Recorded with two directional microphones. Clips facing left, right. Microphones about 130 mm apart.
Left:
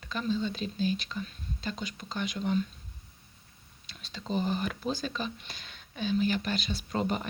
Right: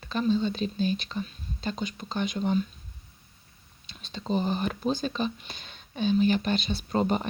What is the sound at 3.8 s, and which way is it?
Speech, 25° right (ahead or behind).